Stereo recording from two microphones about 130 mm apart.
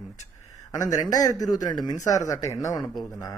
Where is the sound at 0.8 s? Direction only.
25° left (ahead or behind).